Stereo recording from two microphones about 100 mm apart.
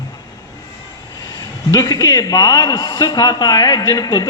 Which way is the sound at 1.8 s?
40° left (ahead or behind).